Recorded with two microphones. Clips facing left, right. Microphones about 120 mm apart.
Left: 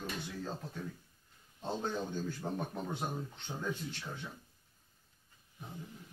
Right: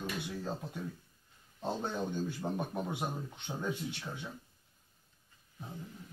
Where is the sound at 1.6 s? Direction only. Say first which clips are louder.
Right 1 dB; 15° right (ahead or behind).